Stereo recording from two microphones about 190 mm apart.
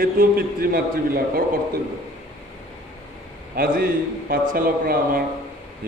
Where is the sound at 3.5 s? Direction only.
50° right (ahead or behind).